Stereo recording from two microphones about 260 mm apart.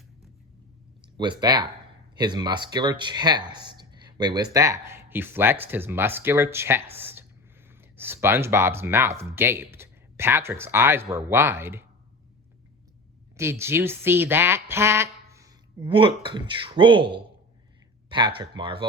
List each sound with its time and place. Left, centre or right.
1.1 s speech: centre
7.0 s a sound: centre
7.8 s speech: centre
13.3 s speech: centre
18.1 s speech: centre